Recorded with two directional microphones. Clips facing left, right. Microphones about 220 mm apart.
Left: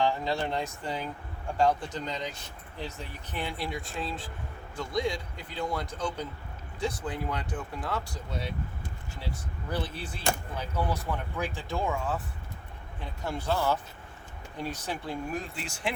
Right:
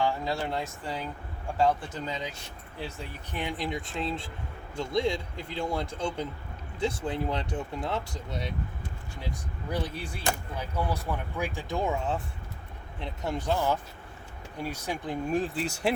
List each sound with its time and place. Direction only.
0.0 s speech: 5° right (ahead or behind)
3.3 s speech: 15° right (ahead or behind)
15.3 s speech: 35° right (ahead or behind)